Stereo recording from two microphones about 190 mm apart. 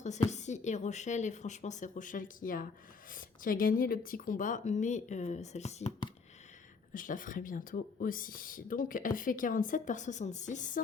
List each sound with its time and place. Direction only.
0.0 s a woman's voice: 35° left (ahead or behind)
6.9 s speech: 45° left (ahead or behind)